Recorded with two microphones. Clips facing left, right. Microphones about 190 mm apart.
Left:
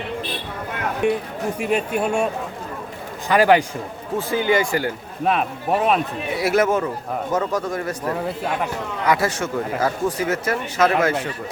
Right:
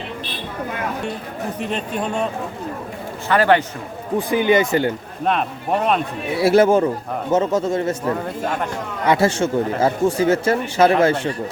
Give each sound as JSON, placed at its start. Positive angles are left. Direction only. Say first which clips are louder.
{"t": 1.0, "sound": "a man's voice", "louder": "left 5 dB", "side_deg": 15}
{"t": 4.2, "sound": "speech", "louder": "right 3 dB", "side_deg": -15}
{"t": 5.2, "sound": "speech", "louder": "even", "side_deg": 5}
{"t": 6.3, "sound": "a man's voice", "louder": "right 5 dB", "side_deg": -30}
{"t": 9.0, "sound": "speech", "louder": "right 4 dB", "side_deg": -25}